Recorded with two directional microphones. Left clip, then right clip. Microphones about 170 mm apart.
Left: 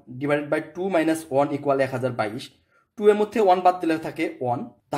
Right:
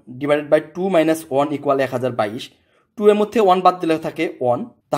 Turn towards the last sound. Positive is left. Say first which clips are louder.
# right 6 dB
turn(degrees=-30)  # may be behind; listen again after turning